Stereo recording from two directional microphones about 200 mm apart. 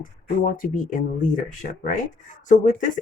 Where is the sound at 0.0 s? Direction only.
45° left (ahead or behind).